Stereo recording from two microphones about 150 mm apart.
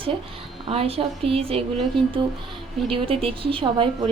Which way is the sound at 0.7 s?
40° right (ahead or behind).